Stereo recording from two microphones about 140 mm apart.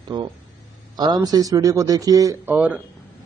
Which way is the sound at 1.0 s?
30° right (ahead or behind).